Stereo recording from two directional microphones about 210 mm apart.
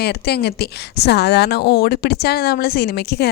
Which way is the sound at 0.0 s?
50° left (ahead or behind).